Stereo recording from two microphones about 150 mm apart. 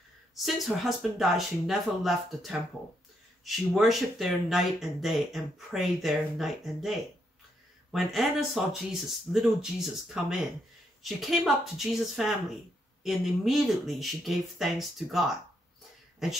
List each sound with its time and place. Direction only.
0.4 s speech: centre (ahead or behind)